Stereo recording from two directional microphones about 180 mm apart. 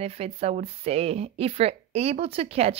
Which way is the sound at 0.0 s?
35° right (ahead or behind).